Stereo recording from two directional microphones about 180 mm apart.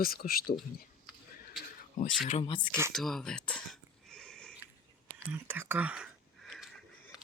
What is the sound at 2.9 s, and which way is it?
Speech, centre (ahead or behind).